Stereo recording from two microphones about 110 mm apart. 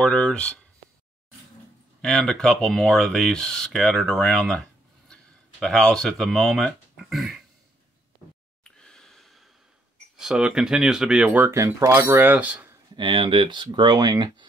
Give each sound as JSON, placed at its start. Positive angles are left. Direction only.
{"t": 0.0, "sound": "speech", "side_deg": 10}
{"t": 2.0, "sound": "speech", "side_deg": 5}
{"t": 8.6, "sound": "breathing", "side_deg": 5}
{"t": 10.1, "sound": "speech", "side_deg": -5}
{"t": 11.5, "sound": "speech", "side_deg": -25}
{"t": 12.9, "sound": "speech", "side_deg": -50}